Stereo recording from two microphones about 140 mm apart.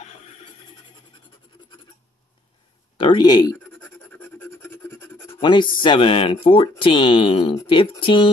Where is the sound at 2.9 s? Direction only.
30° left (ahead or behind).